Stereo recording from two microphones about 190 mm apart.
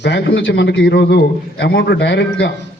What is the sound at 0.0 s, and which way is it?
A man's voice, 70° left (ahead or behind).